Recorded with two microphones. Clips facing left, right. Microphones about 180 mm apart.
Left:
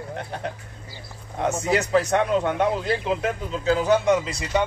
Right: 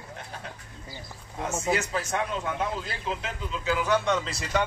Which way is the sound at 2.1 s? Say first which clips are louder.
Left 8 dB; 65° left (ahead or behind).